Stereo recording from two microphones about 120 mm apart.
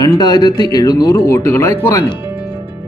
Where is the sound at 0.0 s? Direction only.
30° left (ahead or behind).